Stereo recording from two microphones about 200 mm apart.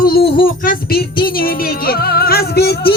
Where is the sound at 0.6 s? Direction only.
50° left (ahead or behind).